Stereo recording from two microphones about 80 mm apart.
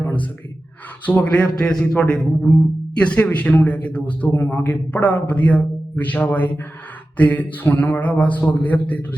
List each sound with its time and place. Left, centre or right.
0.0 s gasp: centre
1.0 s a man's voice: centre